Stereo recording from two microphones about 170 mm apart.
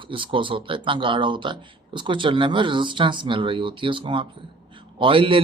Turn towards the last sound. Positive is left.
turn(degrees=-30)  # may be behind; listen again after turning